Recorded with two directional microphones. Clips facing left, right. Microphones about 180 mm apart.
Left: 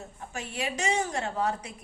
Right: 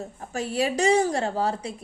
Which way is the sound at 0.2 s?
35° right (ahead or behind).